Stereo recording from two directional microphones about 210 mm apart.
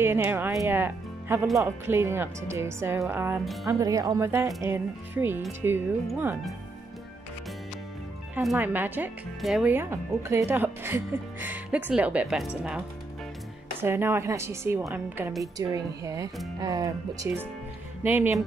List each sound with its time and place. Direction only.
0.0 s speech: 10° right (ahead or behind)
8.4 s speech: 5° right (ahead or behind)
13.7 s speech: 10° right (ahead or behind)